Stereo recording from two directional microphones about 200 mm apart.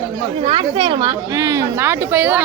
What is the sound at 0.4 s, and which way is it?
A woman's voice, 25° right (ahead or behind).